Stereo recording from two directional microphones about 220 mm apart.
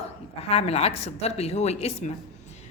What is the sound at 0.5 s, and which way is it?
A woman's voice, 30° left (ahead or behind).